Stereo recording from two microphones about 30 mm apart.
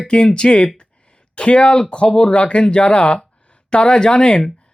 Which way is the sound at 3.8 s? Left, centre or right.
Left.